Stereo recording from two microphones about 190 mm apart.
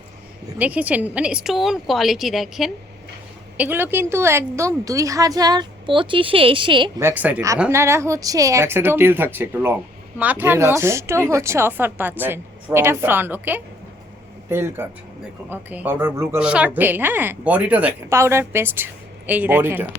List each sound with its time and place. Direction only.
0.6 s a woman's voice: 10° right (ahead or behind); by 7.0 s 25° right (ahead or behind)
7.0 s speech: 10° right (ahead or behind)